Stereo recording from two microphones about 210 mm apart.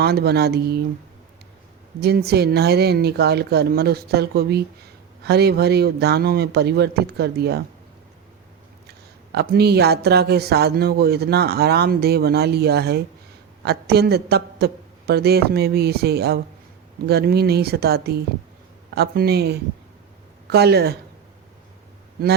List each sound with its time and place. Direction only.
0.0 s speech: 50° right (ahead or behind)
2.0 s speech: 50° right (ahead or behind)
9.3 s speech: 50° right (ahead or behind)